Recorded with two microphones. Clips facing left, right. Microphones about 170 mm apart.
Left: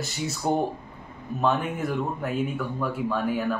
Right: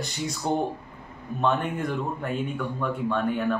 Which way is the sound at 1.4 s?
5° left (ahead or behind).